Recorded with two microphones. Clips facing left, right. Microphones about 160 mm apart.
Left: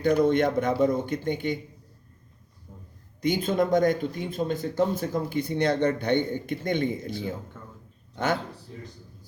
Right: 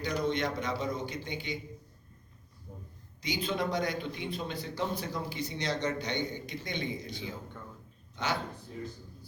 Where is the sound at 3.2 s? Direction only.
50° left (ahead or behind).